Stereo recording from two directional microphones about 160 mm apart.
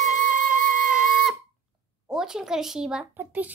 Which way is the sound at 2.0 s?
5° right (ahead or behind).